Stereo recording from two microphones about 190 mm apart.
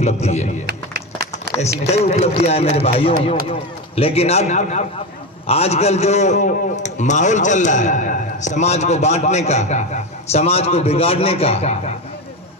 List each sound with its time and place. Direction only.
0.0 s a man's voice: 35° left (ahead or behind)
0.7 s a sound: 55° right (ahead or behind)
1.6 s a man's voice: 35° left (ahead or behind)